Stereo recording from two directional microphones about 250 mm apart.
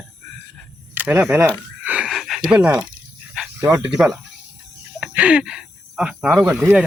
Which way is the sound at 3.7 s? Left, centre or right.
Centre.